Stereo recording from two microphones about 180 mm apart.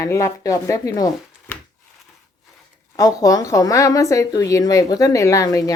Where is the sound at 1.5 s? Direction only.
5° left (ahead or behind).